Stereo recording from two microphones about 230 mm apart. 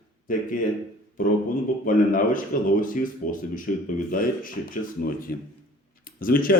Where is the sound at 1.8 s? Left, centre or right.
Left.